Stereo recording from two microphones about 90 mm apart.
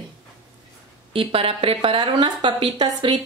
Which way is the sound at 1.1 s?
90° right.